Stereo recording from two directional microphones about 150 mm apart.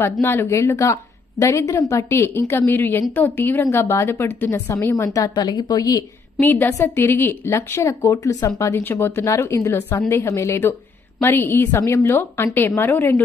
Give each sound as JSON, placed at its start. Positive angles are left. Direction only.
{"t": 0.0, "sound": "a woman's voice", "side_deg": 15}
{"t": 6.4, "sound": "a woman's voice", "side_deg": 15}